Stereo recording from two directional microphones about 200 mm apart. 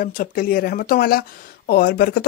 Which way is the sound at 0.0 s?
45° left (ahead or behind).